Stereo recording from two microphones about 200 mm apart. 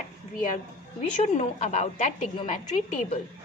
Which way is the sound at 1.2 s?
35° left (ahead or behind).